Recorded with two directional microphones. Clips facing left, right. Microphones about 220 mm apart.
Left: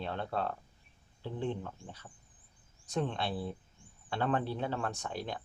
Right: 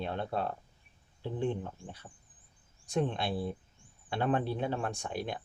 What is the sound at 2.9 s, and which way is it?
Speech, 15° right (ahead or behind).